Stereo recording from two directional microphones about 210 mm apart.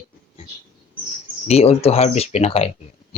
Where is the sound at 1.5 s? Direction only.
30° left (ahead or behind).